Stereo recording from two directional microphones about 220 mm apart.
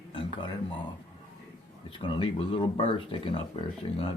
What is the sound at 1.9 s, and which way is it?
Speech, 25° left (ahead or behind).